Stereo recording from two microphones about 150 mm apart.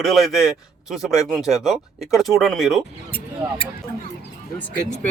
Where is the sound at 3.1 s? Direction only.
40° left (ahead or behind).